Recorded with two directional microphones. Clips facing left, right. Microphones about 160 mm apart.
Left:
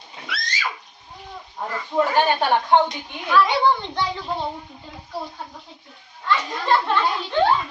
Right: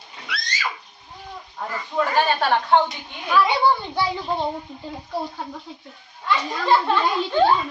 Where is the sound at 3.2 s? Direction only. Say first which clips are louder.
Even; 10° right (ahead or behind).